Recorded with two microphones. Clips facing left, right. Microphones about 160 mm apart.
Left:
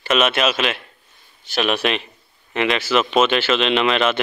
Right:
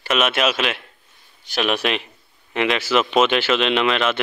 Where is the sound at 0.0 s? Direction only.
10° right (ahead or behind).